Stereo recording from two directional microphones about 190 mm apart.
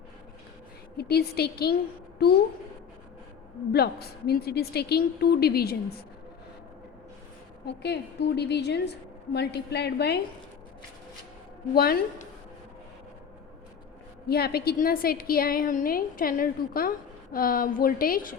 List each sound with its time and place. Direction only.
0.9 s a woman's voice: 55° left (ahead or behind)
3.7 s a woman's voice: 55° left (ahead or behind)
7.7 s a woman's voice: 60° left (ahead or behind)
11.7 s a woman's voice: 55° left (ahead or behind)
14.3 s a woman's voice: 55° left (ahead or behind)